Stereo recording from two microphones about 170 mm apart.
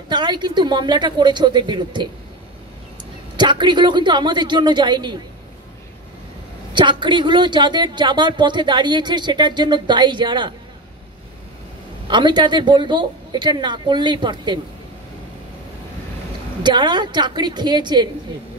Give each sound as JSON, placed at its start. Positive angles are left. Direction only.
{"t": 0.1, "sound": "a woman's voice", "side_deg": -25}
{"t": 3.3, "sound": "a woman's voice", "side_deg": -25}
{"t": 6.7, "sound": "a woman's voice", "side_deg": -25}
{"t": 12.1, "sound": "a woman's voice", "side_deg": -25}
{"t": 16.6, "sound": "a woman's voice", "side_deg": -25}